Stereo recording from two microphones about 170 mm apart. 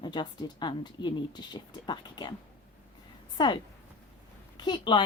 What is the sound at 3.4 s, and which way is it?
A woman's voice, 25° left (ahead or behind).